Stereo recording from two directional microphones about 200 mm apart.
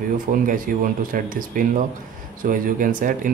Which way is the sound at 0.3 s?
45° right (ahead or behind).